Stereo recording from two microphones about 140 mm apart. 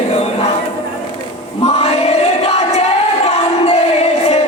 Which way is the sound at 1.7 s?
50° left (ahead or behind).